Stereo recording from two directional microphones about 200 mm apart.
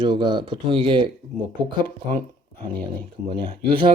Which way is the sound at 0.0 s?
25° right (ahead or behind).